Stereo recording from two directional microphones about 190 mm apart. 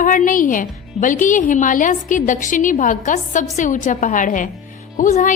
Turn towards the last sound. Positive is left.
turn(degrees=40)  # may be behind; listen again after turning